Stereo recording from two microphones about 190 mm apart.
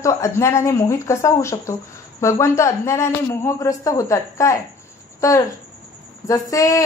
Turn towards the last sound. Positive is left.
turn(degrees=20)  # may be behind; listen again after turning